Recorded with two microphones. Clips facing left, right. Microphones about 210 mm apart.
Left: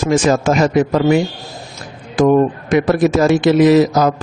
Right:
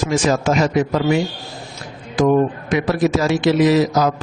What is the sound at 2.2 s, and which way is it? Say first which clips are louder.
A man's voice: left 3 dB; 50° left (ahead or behind).